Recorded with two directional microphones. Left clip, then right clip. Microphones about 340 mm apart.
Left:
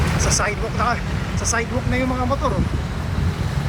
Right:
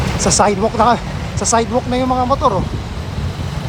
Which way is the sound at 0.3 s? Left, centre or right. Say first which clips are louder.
Right 9 dB; centre.